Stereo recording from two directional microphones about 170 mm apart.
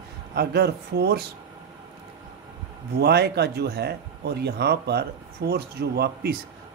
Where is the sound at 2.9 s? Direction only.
70° right (ahead or behind).